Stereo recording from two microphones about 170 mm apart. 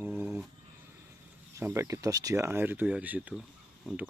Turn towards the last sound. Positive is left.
turn(degrees=0)  # may be behind; listen again after turning